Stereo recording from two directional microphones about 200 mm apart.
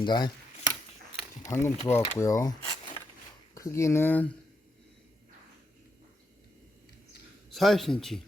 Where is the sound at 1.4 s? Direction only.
15° left (ahead or behind).